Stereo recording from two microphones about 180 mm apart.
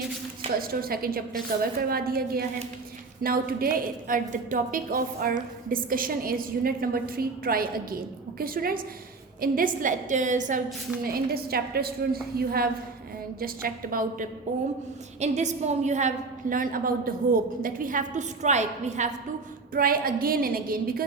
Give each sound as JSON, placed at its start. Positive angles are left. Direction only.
{"t": 0.6, "sound": "a woman's voice", "side_deg": -55}
{"t": 11.0, "sound": "a woman's voice", "side_deg": -55}
{"t": 19.7, "sound": "a woman's voice", "side_deg": -55}